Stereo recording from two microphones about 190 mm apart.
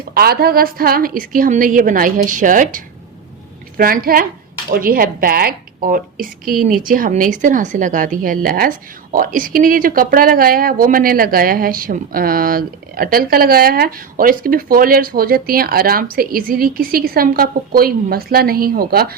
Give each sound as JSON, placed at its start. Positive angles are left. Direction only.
{"t": 0.1, "sound": "speech", "side_deg": -55}